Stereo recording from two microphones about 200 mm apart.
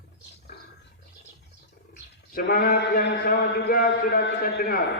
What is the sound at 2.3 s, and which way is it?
A man's voice, 45° left (ahead or behind).